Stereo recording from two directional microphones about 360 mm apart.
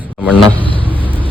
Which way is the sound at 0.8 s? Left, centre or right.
Centre.